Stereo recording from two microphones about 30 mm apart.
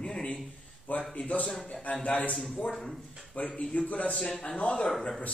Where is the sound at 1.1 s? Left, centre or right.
Left.